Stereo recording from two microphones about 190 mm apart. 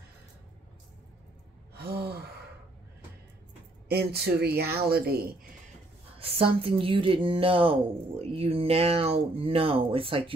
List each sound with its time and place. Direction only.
1.8 s gasp: 55° right (ahead or behind)
3.9 s speech: 55° right (ahead or behind)
6.1 s speech: 30° right (ahead or behind)